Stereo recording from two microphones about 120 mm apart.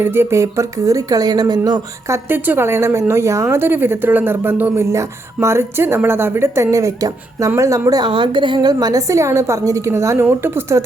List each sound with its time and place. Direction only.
0.0 s speech: 20° right (ahead or behind)
2.1 s speech: 20° right (ahead or behind)